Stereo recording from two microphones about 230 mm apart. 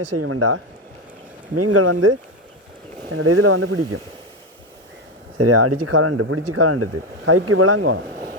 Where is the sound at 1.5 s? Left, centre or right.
Right.